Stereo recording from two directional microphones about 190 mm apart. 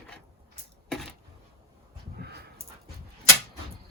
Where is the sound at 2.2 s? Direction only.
60° right (ahead or behind).